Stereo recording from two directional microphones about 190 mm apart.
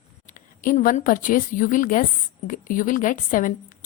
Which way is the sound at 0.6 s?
50° left (ahead or behind).